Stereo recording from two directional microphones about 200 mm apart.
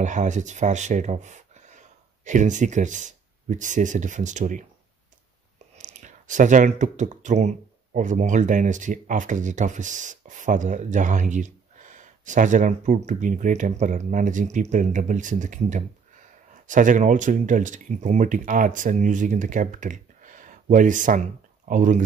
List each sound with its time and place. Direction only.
0.0 s speech: 40° right (ahead or behind)
5.8 s speech: 40° right (ahead or behind)